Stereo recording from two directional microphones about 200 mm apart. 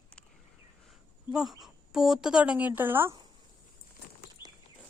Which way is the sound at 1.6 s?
Centre (ahead or behind).